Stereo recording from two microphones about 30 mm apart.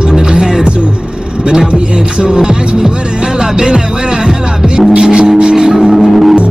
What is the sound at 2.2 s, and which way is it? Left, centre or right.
Music, right.